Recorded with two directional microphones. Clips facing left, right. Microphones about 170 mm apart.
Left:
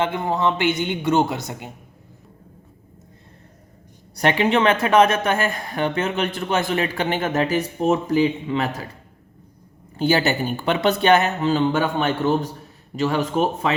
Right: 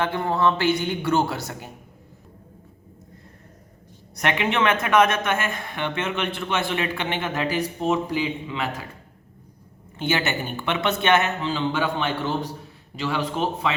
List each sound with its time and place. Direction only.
0.0 s speech: 20° left (ahead or behind)
4.1 s speech: 35° left (ahead or behind)
10.0 s speech: 35° left (ahead or behind)